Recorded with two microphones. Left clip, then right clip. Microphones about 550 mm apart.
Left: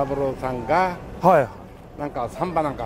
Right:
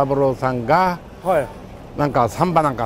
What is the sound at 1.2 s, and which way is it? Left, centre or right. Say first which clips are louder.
Speech: left 3 dB; left.